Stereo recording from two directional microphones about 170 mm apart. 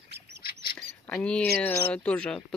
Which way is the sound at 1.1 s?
10° left (ahead or behind).